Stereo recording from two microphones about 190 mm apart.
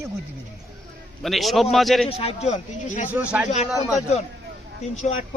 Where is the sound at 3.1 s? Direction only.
5° right (ahead or behind).